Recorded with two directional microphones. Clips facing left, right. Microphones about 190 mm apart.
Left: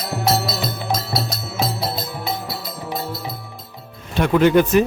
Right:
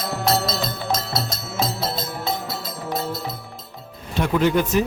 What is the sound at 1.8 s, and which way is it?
Music, 20° right (ahead or behind).